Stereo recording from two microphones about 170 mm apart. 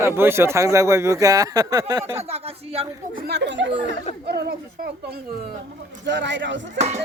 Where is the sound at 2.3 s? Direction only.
35° right (ahead or behind).